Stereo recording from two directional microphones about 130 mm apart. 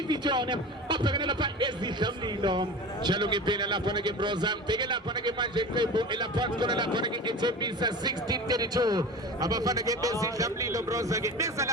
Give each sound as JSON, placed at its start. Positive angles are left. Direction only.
{"t": 0.1, "sound": "a man's voice", "side_deg": -35}